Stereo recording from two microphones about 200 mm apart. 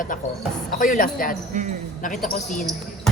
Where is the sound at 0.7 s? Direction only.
40° left (ahead or behind).